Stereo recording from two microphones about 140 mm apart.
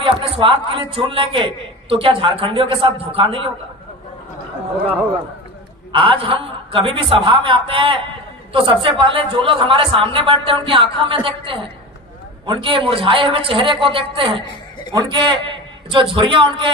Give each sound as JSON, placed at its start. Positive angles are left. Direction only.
{"t": 0.0, "sound": "a man's voice", "side_deg": -40}
{"t": 5.9, "sound": "a man's voice", "side_deg": -40}